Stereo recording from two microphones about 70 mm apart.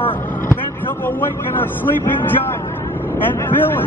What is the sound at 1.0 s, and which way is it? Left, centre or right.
Speech, left.